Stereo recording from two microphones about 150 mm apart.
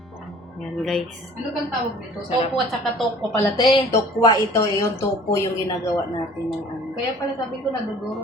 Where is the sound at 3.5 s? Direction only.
30° left (ahead or behind).